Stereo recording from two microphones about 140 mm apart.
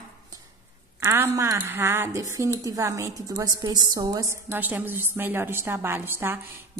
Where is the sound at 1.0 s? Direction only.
20° right (ahead or behind).